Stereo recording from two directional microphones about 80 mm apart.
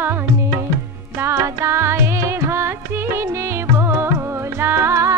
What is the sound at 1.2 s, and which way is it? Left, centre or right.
Music, right.